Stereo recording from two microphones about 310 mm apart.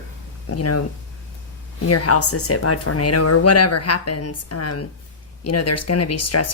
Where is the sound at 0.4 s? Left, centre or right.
Left.